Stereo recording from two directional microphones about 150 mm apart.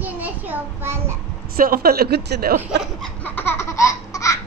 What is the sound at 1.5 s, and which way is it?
A woman's voice, 80° right.